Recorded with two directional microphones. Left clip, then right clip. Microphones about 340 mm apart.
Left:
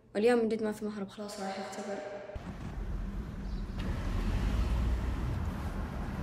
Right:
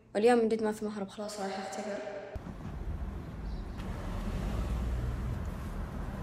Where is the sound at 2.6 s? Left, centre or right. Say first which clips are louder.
Even; right.